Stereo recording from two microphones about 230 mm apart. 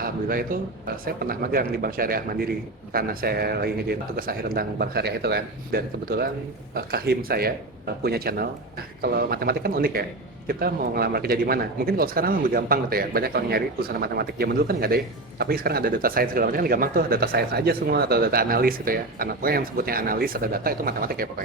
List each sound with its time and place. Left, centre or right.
0.0 s a man's voice: right